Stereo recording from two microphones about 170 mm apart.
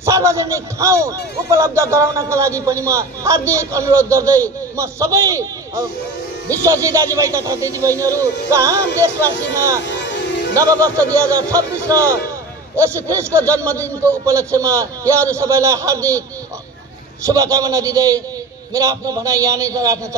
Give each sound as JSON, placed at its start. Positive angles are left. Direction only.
{"t": 0.0, "sound": "a man's voice", "side_deg": -15}
{"t": 9.8, "sound": "music", "side_deg": 90}
{"t": 10.5, "sound": "a man's voice", "side_deg": -20}
{"t": 17.3, "sound": "speech", "side_deg": -20}